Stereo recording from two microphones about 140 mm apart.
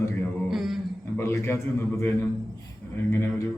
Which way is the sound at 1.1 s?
20° left (ahead or behind).